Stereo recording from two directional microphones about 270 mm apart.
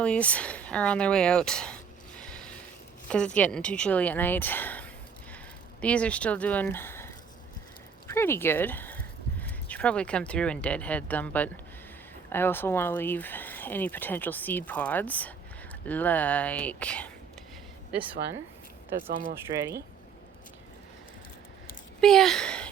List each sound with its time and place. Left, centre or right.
0.0 s a woman's voice: centre
18.9 s speech: right
22.0 s speech: centre